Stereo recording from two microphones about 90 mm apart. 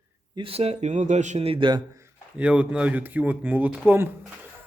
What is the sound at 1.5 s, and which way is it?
Speech, 65° right (ahead or behind).